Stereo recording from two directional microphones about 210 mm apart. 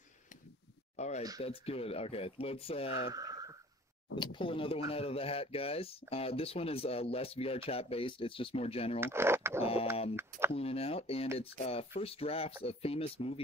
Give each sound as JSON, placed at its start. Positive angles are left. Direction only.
{"t": 0.9, "sound": "speech", "side_deg": 30}
{"t": 3.1, "sound": "a sound", "side_deg": -15}
{"t": 4.2, "sound": "speech", "side_deg": 25}
{"t": 9.0, "sound": "speech", "side_deg": -10}
{"t": 9.6, "sound": "speech", "side_deg": 25}